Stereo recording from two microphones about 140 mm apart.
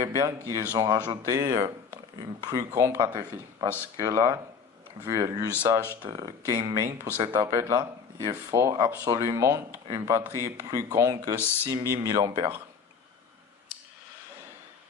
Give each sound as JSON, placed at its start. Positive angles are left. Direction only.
{"t": 0.0, "sound": "speech", "side_deg": -25}
{"t": 1.3, "sound": "speech", "side_deg": -25}
{"t": 11.3, "sound": "speech", "side_deg": 15}
{"t": 11.7, "sound": "speech", "side_deg": -20}